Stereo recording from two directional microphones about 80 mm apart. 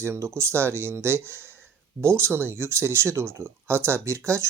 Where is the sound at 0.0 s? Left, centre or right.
Right.